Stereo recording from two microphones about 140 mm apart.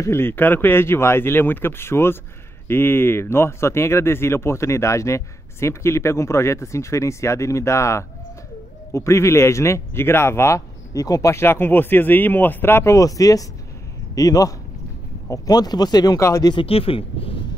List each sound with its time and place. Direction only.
0.0 s speech: 15° left (ahead or behind)
16.5 s speech: 40° left (ahead or behind)